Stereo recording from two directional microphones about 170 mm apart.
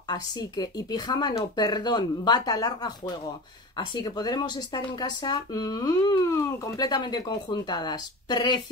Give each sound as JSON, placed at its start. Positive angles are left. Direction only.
{"t": 0.1, "sound": "speech", "side_deg": 25}